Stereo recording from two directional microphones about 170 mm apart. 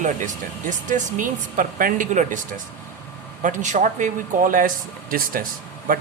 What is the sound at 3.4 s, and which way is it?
Speech, 45° right (ahead or behind).